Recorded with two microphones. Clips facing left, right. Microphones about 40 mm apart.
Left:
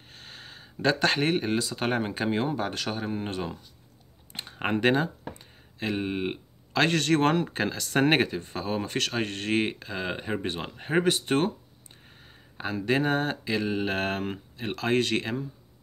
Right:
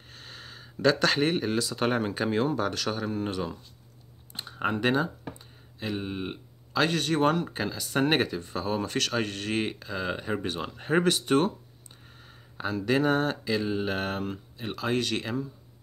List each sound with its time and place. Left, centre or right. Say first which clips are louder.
0.1 s a sound: right 1 dB; left
1.3 s speech: left 1 dB; centre; by 3.5 s left
4.3 s computer keyboard: even; left
4.6 s speech: left 2 dB; left
6.7 s a man's voice: left 2 dB; left
8.6 s speech: right 1 dB; left
10.8 s speech: even; centre
11.1 s speech: right 1 dB; left
12.5 s speech: even; left
13.9 s a man's voice: left 2 dB; left